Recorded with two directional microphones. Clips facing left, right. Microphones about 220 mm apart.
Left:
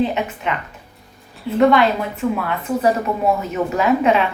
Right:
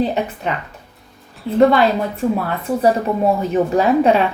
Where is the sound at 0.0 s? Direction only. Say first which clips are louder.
Right 1 dB; 40° right (ahead or behind).